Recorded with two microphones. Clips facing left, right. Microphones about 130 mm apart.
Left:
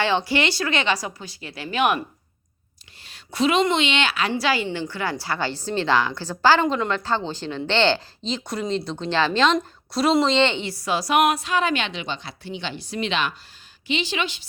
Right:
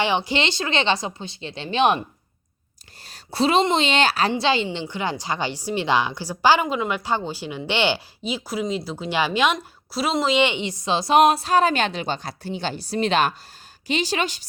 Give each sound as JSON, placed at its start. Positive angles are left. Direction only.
{"t": 0.3, "sound": "a woman's voice", "side_deg": -20}
{"t": 3.0, "sound": "a woman's voice", "side_deg": -35}
{"t": 4.3, "sound": "a woman's voice", "side_deg": -25}